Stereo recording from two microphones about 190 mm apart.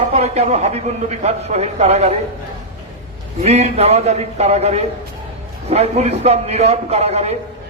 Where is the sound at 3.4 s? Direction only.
35° right (ahead or behind).